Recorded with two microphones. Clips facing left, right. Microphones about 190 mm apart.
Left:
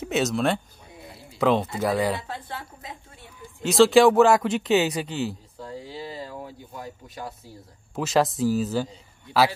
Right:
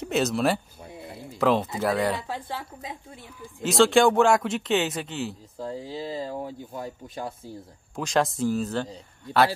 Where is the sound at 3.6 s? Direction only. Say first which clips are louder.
Left 3 dB; centre (ahead or behind).